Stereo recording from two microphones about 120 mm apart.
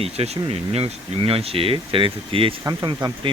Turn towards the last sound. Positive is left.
turn(degrees=-40)  # may be behind; listen again after turning